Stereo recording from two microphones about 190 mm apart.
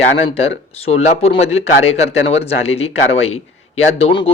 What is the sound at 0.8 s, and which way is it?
Speech, 35° left (ahead or behind).